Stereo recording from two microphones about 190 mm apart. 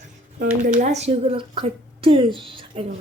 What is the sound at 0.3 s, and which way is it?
A woman's voice, 40° right (ahead or behind).